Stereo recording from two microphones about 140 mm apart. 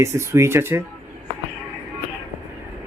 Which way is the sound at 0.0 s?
20° right (ahead or behind).